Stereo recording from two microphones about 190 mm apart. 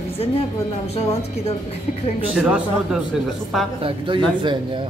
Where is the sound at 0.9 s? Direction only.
35° left (ahead or behind).